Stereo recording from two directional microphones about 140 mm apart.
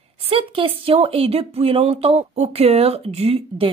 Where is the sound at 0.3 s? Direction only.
40° right (ahead or behind).